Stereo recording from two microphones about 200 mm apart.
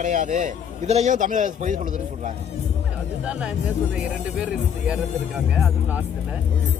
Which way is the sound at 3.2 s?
5° right (ahead or behind).